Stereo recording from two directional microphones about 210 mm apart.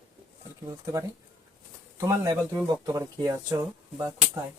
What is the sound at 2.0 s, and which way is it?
Speech, 15° right (ahead or behind).